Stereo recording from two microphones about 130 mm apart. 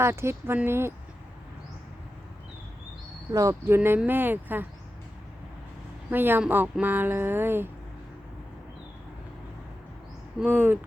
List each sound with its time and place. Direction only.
0.0 s speech: 20° right (ahead or behind)
3.3 s speech: 25° right (ahead or behind)
6.1 s speech: 15° right (ahead or behind)
10.4 s speech: 15° right (ahead or behind)